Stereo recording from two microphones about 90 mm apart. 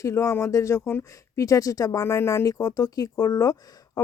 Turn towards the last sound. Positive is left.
turn(degrees=40)  # may be behind; listen again after turning